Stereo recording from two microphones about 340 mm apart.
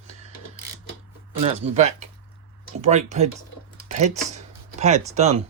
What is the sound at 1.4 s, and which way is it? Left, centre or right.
Speech, centre.